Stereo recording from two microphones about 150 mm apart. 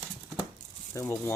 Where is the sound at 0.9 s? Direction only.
15° left (ahead or behind).